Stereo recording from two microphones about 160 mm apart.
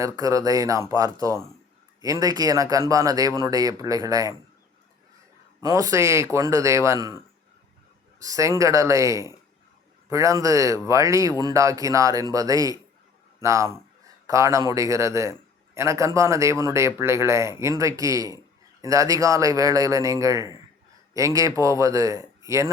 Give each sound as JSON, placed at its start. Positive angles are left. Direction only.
{"t": 0.0, "sound": "a man's voice", "side_deg": -20}
{"t": 5.5, "sound": "a man's voice", "side_deg": -20}
{"t": 8.2, "sound": "a man's voice", "side_deg": -20}